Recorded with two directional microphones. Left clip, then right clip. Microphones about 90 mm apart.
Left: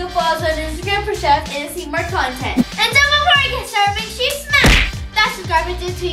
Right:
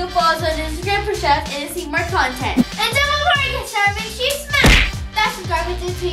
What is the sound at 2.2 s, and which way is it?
Speech, 15° right (ahead or behind).